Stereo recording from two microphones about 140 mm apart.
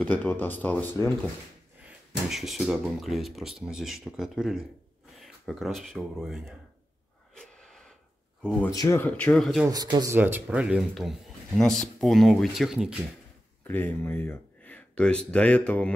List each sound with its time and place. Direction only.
0.0 s speech: 15° left (ahead or behind)
1.8 s speech: 5° right (ahead or behind)
7.3 s wheeze: 5° left (ahead or behind)
8.4 s speech: 5° left (ahead or behind)
8.7 s speech: 25° left (ahead or behind)
9.0 s speech: 10° left (ahead or behind)
9.7 s speech: 30° right (ahead or behind)
10.1 s speech: 15° right (ahead or behind)
13.7 s speech: 15° left (ahead or behind)